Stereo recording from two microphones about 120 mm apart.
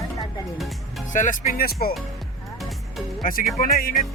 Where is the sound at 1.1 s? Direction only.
90° left.